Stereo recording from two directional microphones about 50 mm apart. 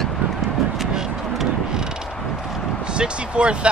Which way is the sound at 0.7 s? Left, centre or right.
Centre.